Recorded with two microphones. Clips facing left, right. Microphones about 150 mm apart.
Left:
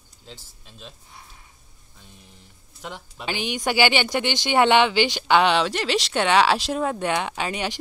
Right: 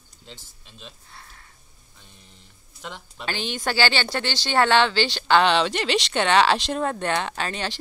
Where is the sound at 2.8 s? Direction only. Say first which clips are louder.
Left 1 dB; 5° left (ahead or behind).